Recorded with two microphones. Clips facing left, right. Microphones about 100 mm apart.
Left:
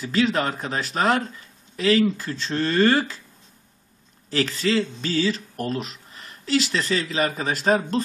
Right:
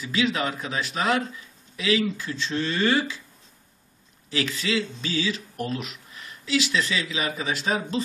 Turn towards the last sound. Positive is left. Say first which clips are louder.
# left 5 dB
turn(degrees=45)  # may be behind; listen again after turning